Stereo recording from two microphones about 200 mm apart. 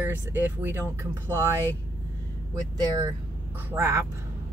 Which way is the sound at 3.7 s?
15° right (ahead or behind).